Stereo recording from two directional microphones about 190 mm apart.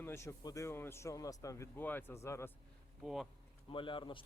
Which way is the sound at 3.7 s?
25° left (ahead or behind).